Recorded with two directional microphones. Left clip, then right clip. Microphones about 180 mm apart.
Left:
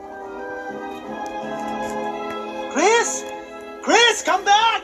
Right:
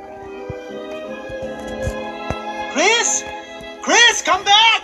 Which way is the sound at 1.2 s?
5° left (ahead or behind).